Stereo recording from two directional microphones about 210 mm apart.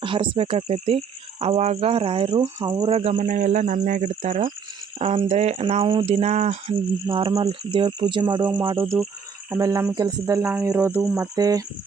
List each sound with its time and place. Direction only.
0.0 s speech: 25° right (ahead or behind)
3.0 s speech: 35° right (ahead or behind)
9.5 s speech: 15° right (ahead or behind)